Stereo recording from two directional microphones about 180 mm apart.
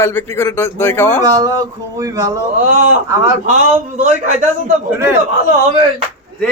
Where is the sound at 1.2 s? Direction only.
20° right (ahead or behind).